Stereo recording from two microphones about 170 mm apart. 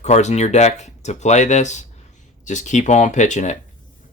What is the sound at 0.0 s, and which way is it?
Speech, 40° left (ahead or behind).